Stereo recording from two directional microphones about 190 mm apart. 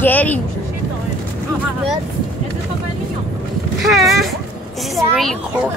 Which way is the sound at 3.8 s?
Centre (ahead or behind).